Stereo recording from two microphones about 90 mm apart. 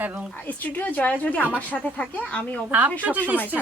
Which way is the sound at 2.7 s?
20° right (ahead or behind).